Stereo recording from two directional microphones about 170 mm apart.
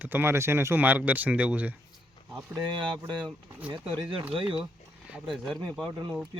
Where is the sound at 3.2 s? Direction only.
5° right (ahead or behind).